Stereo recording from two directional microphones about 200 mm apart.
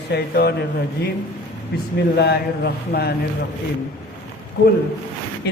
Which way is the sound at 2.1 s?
55° left (ahead or behind).